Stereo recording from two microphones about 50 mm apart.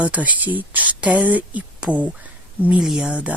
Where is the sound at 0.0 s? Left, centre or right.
Right.